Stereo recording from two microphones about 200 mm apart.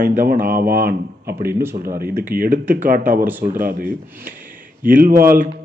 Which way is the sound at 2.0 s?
50° right (ahead or behind).